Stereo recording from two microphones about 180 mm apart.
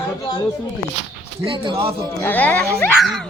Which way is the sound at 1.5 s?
30° right (ahead or behind).